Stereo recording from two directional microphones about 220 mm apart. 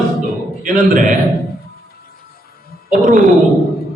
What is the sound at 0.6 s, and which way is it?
Speech, 35° right (ahead or behind).